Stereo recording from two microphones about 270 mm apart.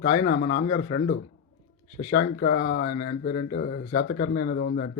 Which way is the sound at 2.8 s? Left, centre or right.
Left.